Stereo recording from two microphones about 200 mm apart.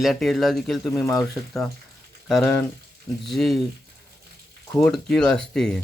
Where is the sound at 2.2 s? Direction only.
Centre (ahead or behind).